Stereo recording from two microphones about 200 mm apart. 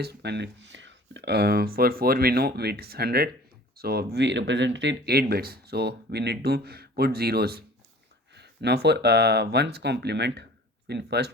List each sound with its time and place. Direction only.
0.0 s speech: 55° right (ahead or behind)